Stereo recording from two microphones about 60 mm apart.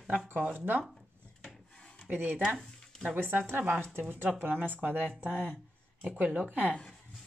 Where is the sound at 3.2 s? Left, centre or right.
Right.